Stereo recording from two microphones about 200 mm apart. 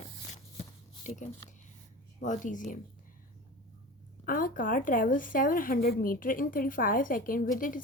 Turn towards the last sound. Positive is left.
turn(degrees=40)  # may be behind; listen again after turning